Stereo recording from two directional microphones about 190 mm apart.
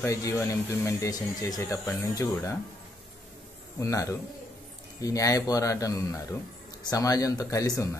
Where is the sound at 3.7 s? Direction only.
15° left (ahead or behind).